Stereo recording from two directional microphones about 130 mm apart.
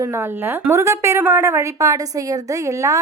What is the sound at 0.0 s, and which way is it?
A woman's voice, 20° right (ahead or behind).